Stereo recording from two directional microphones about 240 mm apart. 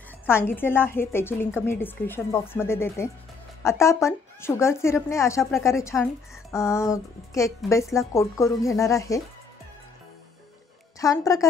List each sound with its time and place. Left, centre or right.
0.3 s speech: centre
11.0 s speech: centre